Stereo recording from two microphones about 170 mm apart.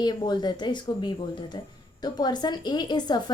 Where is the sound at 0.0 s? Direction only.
25° left (ahead or behind).